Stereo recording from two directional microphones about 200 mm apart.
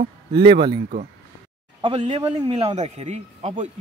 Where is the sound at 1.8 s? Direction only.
25° right (ahead or behind).